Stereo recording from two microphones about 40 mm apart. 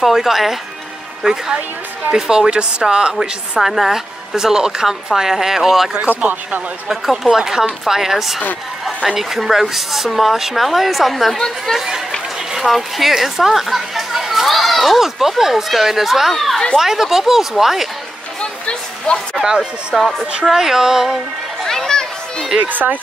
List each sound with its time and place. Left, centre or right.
0.0 s speech: centre
2.1 s a woman's voice: centre
3.6 s speech: centre
6.0 s speech: right
6.9 s speech: centre
11.3 s speech: centre
12.5 s speech: centre
16.7 s speech: centre
18.4 s a sound: left
19.4 s speech: centre
20.0 s speech: centre
20.4 s speech: centre
21.6 s children playing: centre
22.6 s speech: right